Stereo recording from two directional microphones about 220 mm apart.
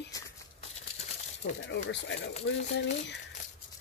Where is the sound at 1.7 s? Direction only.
55° left (ahead or behind).